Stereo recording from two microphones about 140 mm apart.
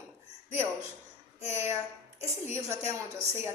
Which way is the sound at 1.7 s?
20° right (ahead or behind).